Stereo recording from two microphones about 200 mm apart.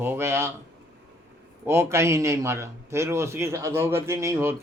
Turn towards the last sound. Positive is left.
turn(degrees=-10)  # may be behind; listen again after turning